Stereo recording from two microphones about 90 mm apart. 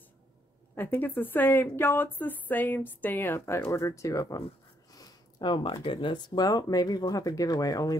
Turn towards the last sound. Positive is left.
turn(degrees=40)  # may be behind; listen again after turning